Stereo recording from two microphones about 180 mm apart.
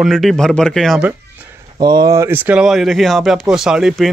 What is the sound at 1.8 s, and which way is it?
Speech, 25° right (ahead or behind).